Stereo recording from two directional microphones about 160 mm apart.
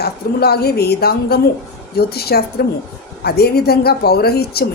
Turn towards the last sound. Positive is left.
turn(degrees=80)